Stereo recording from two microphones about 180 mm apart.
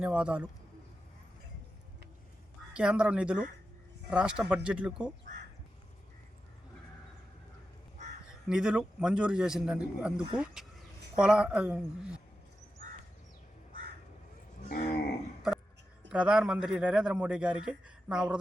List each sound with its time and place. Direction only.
0.0 s a man's voice: 5° right (ahead or behind)
2.7 s a man's voice: 5° right (ahead or behind)
8.4 s a man's voice: 5° right (ahead or behind)
14.7 s speech: 50° left (ahead or behind)
16.0 s a man's voice: 5° right (ahead or behind)